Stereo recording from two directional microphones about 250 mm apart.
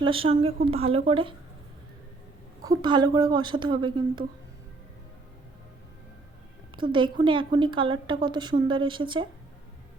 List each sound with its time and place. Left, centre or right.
0.0 s a woman's voice: right
2.6 s a woman's voice: centre
6.7 s a woman's voice: centre